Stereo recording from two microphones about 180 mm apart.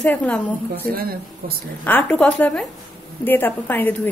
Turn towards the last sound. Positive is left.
turn(degrees=10)  # may be behind; listen again after turning